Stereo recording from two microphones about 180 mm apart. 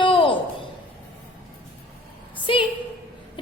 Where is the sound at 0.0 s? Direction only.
30° left (ahead or behind).